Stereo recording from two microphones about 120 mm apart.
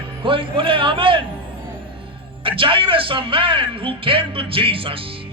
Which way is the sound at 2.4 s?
45° right (ahead or behind).